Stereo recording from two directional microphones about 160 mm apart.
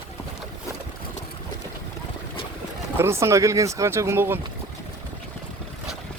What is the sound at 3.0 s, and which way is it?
Speech, 15° right (ahead or behind).